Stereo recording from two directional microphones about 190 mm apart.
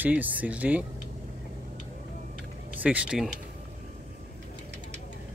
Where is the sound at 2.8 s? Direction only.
5° right (ahead or behind).